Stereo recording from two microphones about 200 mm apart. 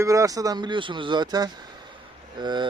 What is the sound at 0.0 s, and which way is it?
Speech, 15° right (ahead or behind).